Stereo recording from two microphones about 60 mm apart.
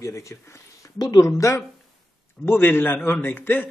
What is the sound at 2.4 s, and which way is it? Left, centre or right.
Speech, left.